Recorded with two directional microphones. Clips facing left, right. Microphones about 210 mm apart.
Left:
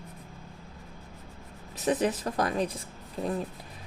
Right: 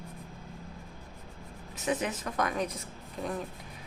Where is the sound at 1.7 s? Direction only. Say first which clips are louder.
Left 5 dB; 35° left (ahead or behind).